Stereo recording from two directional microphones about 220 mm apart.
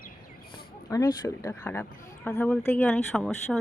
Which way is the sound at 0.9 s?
15° left (ahead or behind).